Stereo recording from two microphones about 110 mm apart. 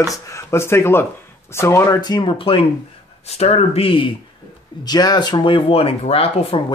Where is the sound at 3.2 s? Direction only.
70° left (ahead or behind).